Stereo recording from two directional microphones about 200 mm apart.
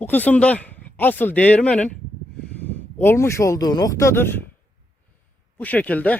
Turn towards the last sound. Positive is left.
turn(degrees=5)  # may be behind; listen again after turning